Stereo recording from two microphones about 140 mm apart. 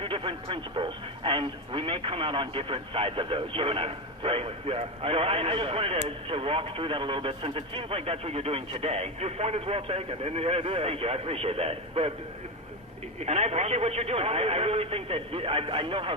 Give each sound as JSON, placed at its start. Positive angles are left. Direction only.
{"t": 0.0, "sound": "speech", "side_deg": -40}
{"t": 13.2, "sound": "speech", "side_deg": -50}